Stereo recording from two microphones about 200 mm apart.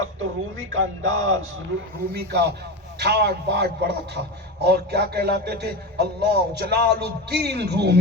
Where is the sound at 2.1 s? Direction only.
55° right (ahead or behind).